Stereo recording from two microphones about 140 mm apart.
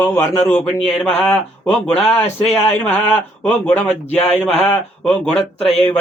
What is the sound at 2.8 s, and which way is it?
A man's voice, 15° left (ahead or behind).